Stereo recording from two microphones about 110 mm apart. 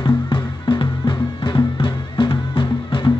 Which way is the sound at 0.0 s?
50° left (ahead or behind).